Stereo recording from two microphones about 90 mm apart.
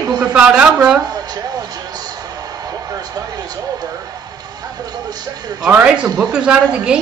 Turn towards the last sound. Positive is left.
turn(degrees=-10)  # may be behind; listen again after turning